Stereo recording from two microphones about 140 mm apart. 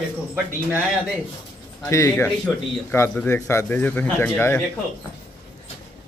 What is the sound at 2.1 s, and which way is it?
Speech, 10° left (ahead or behind).